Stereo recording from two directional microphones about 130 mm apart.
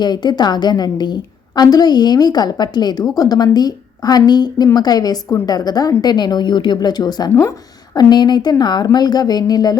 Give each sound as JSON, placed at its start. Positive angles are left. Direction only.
{"t": 0.0, "sound": "a woman's voice", "side_deg": 35}